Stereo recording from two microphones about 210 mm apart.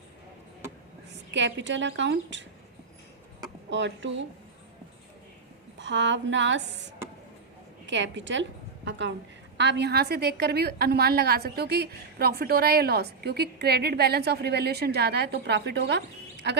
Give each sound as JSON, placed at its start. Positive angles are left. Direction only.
{"t": 1.3, "sound": "a woman's voice", "side_deg": -60}
{"t": 3.7, "sound": "a woman's voice", "side_deg": -60}
{"t": 5.8, "sound": "a woman's voice", "side_deg": -60}
{"t": 7.9, "sound": "a woman's voice", "side_deg": -60}